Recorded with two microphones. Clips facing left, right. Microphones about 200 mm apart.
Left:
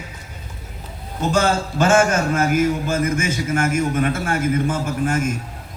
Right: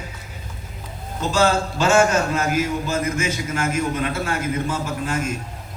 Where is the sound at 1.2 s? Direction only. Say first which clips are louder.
Even; 50° left (ahead or behind).